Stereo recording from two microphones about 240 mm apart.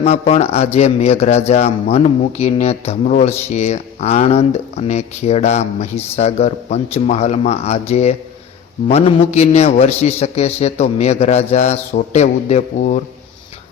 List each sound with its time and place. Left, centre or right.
0.0 s speech: left